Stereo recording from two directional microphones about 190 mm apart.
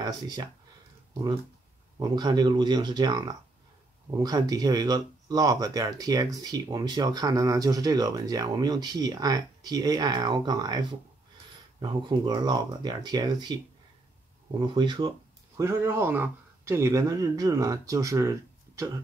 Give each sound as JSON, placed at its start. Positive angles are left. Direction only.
{"t": 0.0, "sound": "speech", "side_deg": -20}
{"t": 2.0, "sound": "speech", "side_deg": -20}
{"t": 14.7, "sound": "speech", "side_deg": -25}
{"t": 15.6, "sound": "speech", "side_deg": -15}